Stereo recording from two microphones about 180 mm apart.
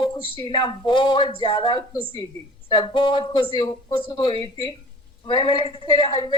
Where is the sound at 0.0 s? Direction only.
30° left (ahead or behind).